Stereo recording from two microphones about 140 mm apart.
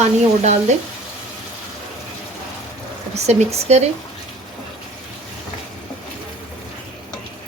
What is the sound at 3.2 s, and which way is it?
Speech, 50° right (ahead or behind).